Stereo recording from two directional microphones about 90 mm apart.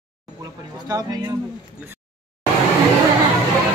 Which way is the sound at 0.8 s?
40° right (ahead or behind).